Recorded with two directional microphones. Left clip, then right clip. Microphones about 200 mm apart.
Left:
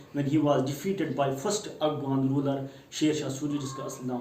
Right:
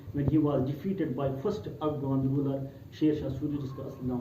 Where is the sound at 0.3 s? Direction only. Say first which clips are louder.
Left 3 dB; 20° left (ahead or behind).